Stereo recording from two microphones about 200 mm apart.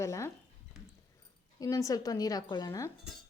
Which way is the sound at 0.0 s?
15° left (ahead or behind).